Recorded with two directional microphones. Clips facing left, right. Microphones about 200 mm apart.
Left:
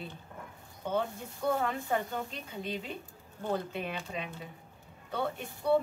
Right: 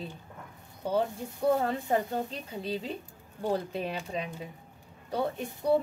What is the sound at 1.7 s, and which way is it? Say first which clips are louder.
Speech: right 4 dB; 35° right (ahead or behind).